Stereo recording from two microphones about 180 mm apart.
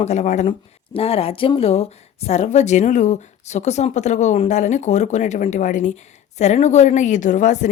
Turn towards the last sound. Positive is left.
turn(degrees=45)  # may be behind; listen again after turning